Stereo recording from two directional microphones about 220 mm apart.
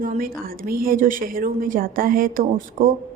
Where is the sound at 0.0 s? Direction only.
40° right (ahead or behind).